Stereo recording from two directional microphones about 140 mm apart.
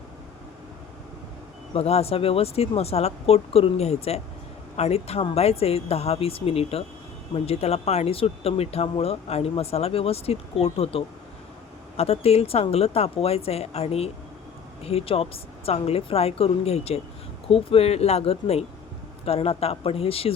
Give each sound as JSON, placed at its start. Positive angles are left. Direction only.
{"t": 1.7, "sound": "speech", "side_deg": 45}